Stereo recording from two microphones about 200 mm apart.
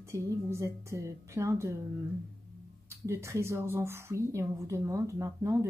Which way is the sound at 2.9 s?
10° right (ahead or behind).